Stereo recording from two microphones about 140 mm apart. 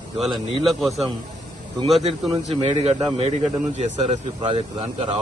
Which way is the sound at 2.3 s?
45° right (ahead or behind).